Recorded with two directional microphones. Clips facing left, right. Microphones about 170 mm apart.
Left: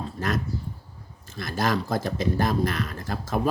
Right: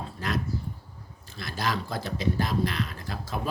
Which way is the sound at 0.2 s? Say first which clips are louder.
Left 4 dB; 45° left (ahead or behind).